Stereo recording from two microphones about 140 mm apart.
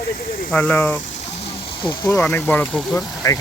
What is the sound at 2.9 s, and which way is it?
Speech, 25° left (ahead or behind).